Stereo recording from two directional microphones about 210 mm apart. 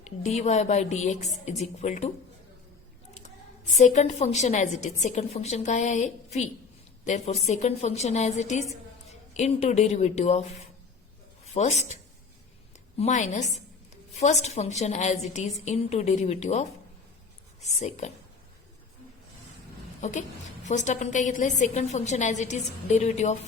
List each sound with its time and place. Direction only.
0.0 s a woman's voice: 35° left (ahead or behind)
3.8 s a woman's voice: 35° left (ahead or behind)
13.0 s a woman's voice: 35° left (ahead or behind)
20.0 s a woman's voice: 35° left (ahead or behind)